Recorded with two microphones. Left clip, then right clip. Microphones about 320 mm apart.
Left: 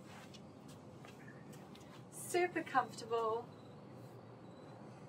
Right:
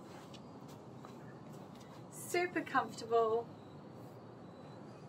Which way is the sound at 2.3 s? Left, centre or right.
Centre.